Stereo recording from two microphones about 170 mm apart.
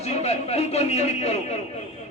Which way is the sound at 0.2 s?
40° left (ahead or behind).